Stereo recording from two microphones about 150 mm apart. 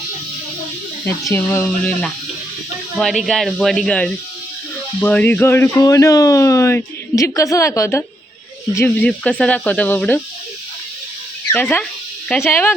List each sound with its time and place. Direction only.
1.3 s speech: 15° left (ahead or behind)
3.0 s a woman's voice: centre (ahead or behind)
11.5 s speech: 15° left (ahead or behind)